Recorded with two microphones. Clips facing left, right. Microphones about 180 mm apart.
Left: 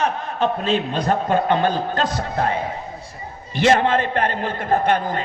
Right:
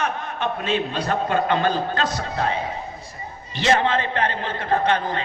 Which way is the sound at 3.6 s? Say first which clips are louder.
Left 3 dB; 50° left (ahead or behind).